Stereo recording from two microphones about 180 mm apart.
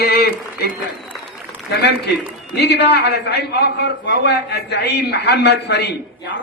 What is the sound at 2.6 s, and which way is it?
A man's voice, 70° left (ahead or behind).